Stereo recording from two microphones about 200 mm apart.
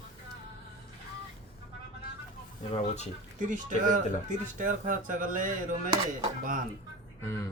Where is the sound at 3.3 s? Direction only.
40° right (ahead or behind).